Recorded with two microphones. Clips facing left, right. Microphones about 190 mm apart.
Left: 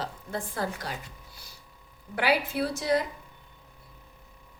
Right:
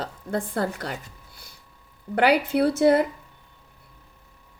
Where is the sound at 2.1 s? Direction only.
60° right (ahead or behind).